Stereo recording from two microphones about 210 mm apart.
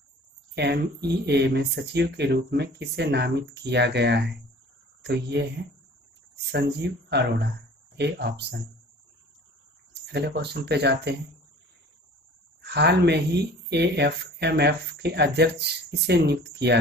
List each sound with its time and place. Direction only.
0.6 s speech: 50° right (ahead or behind)
6.5 s speech: 50° right (ahead or behind)
10.0 s speech: 55° right (ahead or behind)
12.6 s speech: 55° right (ahead or behind)